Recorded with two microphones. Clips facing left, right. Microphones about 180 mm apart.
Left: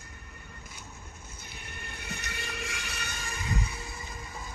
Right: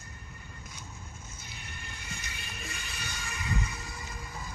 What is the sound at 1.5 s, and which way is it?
Music, 60° left (ahead or behind).